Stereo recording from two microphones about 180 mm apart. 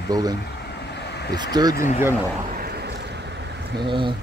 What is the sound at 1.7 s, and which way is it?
Speech, 45° left (ahead or behind).